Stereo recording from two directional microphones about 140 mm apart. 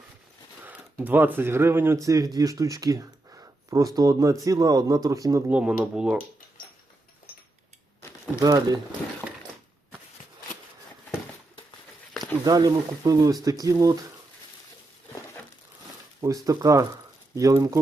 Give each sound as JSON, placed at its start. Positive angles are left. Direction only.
{"t": 0.6, "sound": "speech", "side_deg": -15}
{"t": 5.5, "sound": "a sound", "side_deg": -10}
{"t": 8.4, "sound": "speech", "side_deg": -25}
{"t": 12.5, "sound": "speech", "side_deg": -25}
{"t": 16.2, "sound": "speech", "side_deg": -25}